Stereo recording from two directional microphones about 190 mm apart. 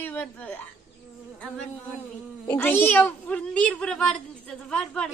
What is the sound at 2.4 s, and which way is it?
A woman's voice, 10° left (ahead or behind).